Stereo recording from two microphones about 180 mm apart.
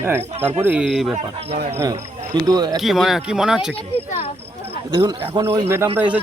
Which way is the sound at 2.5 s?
25° right (ahead or behind).